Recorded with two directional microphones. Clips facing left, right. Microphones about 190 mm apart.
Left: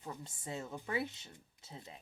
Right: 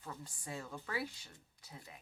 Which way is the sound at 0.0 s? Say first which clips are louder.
Left 3 dB; 20° left (ahead or behind).